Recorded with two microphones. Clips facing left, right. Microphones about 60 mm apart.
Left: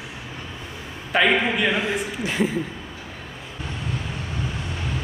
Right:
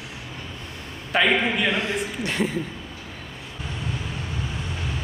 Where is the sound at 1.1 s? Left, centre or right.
Centre.